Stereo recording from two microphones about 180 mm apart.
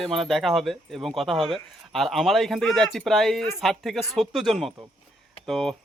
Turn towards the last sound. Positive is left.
turn(degrees=0)  # may be behind; listen again after turning